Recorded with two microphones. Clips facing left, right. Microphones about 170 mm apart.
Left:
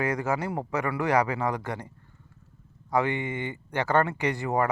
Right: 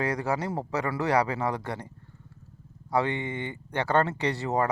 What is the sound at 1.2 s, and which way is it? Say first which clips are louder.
Speech: left 1 dB; 30° right (ahead or behind).